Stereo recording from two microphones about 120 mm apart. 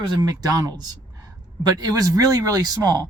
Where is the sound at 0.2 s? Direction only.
30° right (ahead or behind).